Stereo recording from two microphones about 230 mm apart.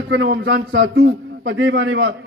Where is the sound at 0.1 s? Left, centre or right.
Right.